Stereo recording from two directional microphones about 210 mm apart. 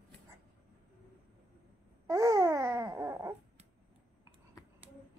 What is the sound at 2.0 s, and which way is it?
Babbling, 15° right (ahead or behind).